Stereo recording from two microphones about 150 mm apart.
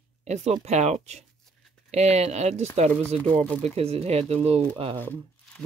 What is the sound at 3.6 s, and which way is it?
Speech, 40° right (ahead or behind).